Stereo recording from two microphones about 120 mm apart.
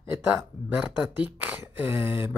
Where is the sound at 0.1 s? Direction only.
15° right (ahead or behind).